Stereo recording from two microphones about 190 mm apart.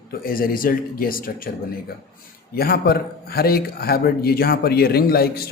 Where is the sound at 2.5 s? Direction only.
55° left (ahead or behind).